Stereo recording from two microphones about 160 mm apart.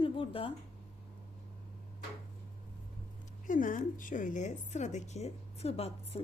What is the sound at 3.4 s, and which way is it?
A woman's voice, 55° left (ahead or behind).